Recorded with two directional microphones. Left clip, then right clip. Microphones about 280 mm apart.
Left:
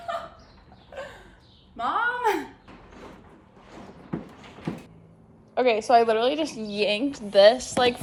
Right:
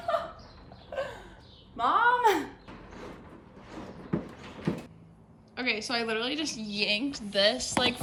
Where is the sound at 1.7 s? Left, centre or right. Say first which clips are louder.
Right 2 dB; centre.